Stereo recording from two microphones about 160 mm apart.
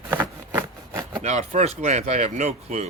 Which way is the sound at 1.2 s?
45° right (ahead or behind).